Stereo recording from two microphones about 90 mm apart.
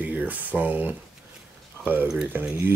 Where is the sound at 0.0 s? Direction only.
20° right (ahead or behind).